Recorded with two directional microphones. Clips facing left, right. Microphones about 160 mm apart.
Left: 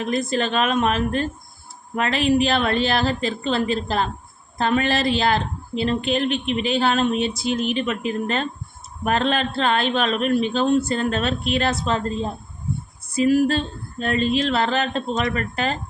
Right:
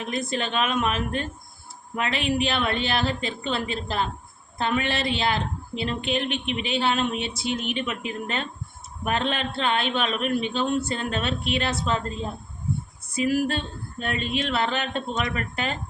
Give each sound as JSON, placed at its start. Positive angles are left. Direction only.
{"t": 0.0, "sound": "speech", "side_deg": 35}